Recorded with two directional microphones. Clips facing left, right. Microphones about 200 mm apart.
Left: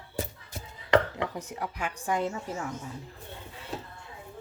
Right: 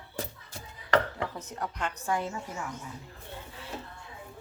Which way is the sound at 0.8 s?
15° left (ahead or behind).